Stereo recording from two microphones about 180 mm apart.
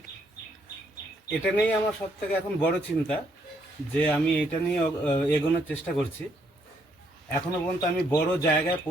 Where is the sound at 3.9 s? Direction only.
5° left (ahead or behind).